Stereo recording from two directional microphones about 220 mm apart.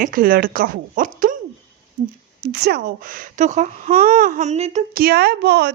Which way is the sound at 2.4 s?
45° right (ahead or behind).